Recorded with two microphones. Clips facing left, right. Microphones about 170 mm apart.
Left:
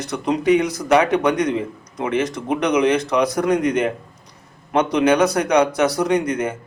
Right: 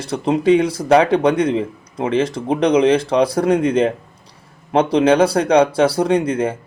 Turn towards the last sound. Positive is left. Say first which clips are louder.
# right 3 dB
turn(degrees=-30)  # may be behind; listen again after turning